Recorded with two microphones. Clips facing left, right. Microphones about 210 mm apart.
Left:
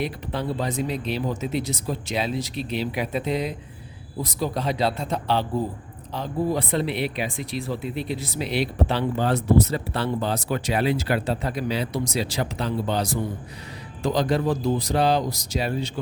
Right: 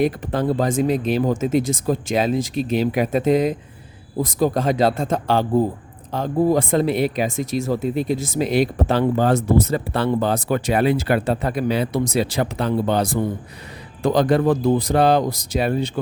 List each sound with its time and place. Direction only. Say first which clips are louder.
0.0 s speech: right 8 dB; 45° right (ahead or behind)